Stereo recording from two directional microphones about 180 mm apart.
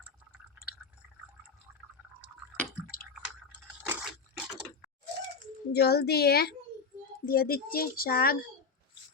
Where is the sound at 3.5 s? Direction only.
5° right (ahead or behind).